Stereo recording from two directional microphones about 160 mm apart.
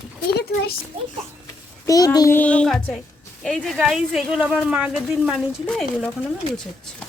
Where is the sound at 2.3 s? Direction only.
10° left (ahead or behind).